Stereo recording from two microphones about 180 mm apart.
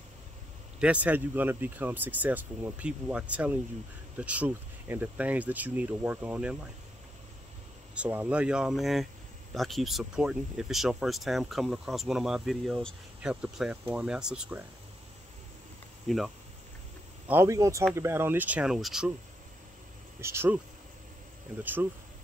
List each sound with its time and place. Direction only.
0.7 s speech: 5° right (ahead or behind)
7.9 s speech: 10° right (ahead or behind)
16.1 s speech: centre (ahead or behind)
17.3 s speech: 15° right (ahead or behind)
20.2 s speech: 15° right (ahead or behind)
21.5 s speech: 10° right (ahead or behind)